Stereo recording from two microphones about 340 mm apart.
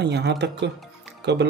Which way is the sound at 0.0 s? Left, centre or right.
Right.